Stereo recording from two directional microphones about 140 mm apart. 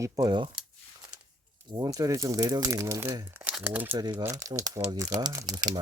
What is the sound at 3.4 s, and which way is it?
Speech, 10° right (ahead or behind).